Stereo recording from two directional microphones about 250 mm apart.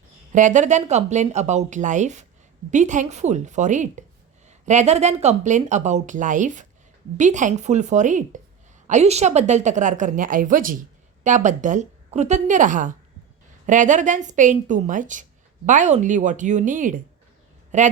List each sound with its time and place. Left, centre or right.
0.3 s a woman's voice: right